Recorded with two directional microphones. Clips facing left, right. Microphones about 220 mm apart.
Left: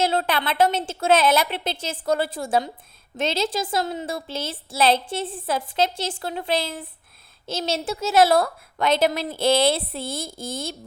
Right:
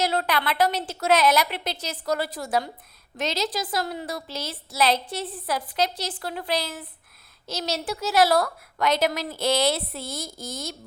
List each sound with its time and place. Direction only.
0.0 s a woman's voice: 25° left (ahead or behind)